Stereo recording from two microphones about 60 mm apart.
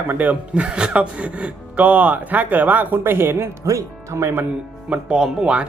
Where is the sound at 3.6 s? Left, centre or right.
Right.